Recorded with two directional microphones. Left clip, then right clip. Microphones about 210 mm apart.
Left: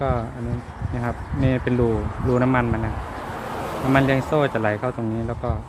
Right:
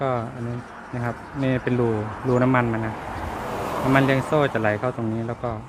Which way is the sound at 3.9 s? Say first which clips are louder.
Left 1 dB; 5° left (ahead or behind).